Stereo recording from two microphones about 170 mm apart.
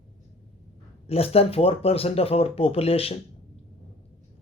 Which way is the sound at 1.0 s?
35° left (ahead or behind).